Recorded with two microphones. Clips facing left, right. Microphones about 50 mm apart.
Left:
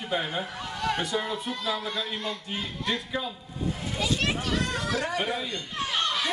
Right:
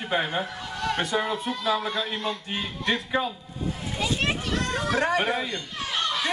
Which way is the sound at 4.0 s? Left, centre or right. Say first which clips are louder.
Right 1 dB; right.